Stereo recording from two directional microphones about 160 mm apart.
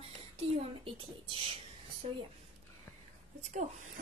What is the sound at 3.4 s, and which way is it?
Speech, 50° right (ahead or behind).